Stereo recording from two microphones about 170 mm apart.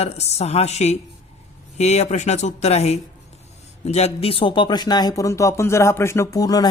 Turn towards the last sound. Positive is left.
turn(degrees=20)  # may be behind; listen again after turning